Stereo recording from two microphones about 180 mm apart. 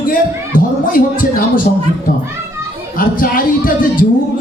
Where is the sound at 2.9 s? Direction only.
50° left (ahead or behind).